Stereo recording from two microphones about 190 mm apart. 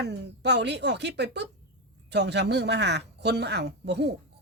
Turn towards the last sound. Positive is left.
turn(degrees=-60)  # may be behind; listen again after turning